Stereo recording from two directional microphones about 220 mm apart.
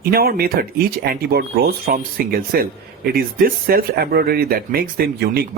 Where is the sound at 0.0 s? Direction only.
45° right (ahead or behind).